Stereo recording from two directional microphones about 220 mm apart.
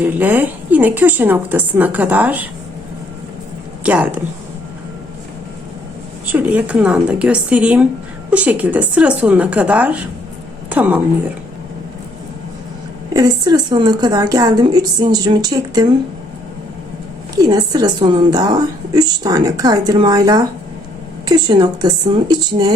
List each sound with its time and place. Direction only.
0.0 s a woman's voice: 5° right (ahead or behind)
3.8 s a woman's voice: 5° right (ahead or behind)
6.3 s a woman's voice: 5° right (ahead or behind)
13.1 s a woman's voice: 20° right (ahead or behind)
17.3 s a woman's voice: 15° right (ahead or behind)